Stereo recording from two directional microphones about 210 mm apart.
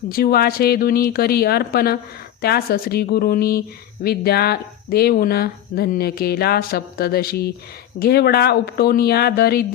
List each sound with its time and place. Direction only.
0.1 s speech: 45° left (ahead or behind)